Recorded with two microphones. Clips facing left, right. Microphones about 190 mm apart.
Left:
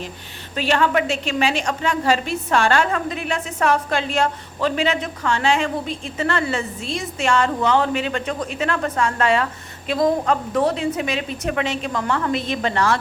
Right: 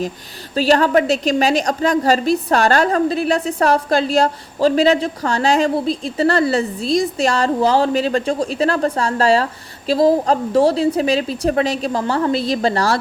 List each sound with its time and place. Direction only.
0.5 s a woman's voice: 35° right (ahead or behind)